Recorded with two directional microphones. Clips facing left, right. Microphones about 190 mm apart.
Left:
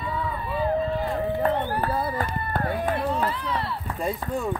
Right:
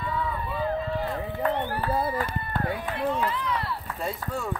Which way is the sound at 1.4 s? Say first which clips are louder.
Left 3 dB; 40° left (ahead or behind).